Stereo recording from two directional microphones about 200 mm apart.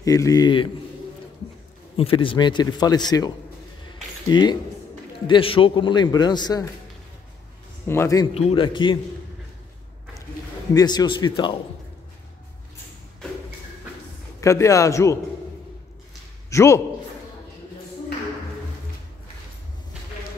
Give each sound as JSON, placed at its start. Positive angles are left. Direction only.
{"t": 0.0, "sound": "a man's voice", "side_deg": 15}
{"t": 2.0, "sound": "a man's voice", "side_deg": 25}
{"t": 3.9, "sound": "a sound", "side_deg": 20}
{"t": 5.2, "sound": "a man's voice", "side_deg": 25}
{"t": 7.8, "sound": "a man's voice", "side_deg": 10}
{"t": 8.4, "sound": "a man's voice", "side_deg": 30}
{"t": 10.7, "sound": "a man's voice", "side_deg": 20}
{"t": 14.4, "sound": "a man's voice", "side_deg": 15}
{"t": 16.4, "sound": "a man's voice", "side_deg": 15}